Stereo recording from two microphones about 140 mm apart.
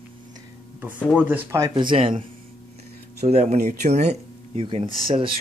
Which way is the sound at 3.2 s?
50° right (ahead or behind).